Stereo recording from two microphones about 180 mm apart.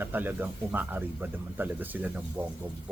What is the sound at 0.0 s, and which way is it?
Speech, 10° right (ahead or behind).